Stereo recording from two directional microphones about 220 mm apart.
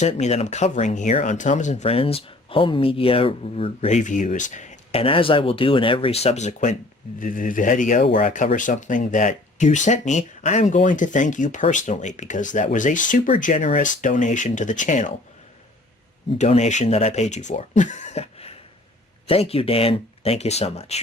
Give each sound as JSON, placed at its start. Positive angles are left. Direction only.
{"t": 0.0, "sound": "speech", "side_deg": 30}
{"t": 16.4, "sound": "speech", "side_deg": 30}